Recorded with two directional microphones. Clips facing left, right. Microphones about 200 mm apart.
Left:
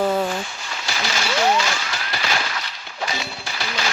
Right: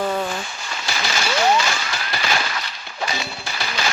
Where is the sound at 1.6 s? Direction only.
50° right (ahead or behind).